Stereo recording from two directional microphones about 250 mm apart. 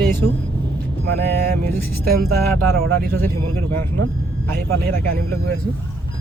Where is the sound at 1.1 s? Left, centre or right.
Right.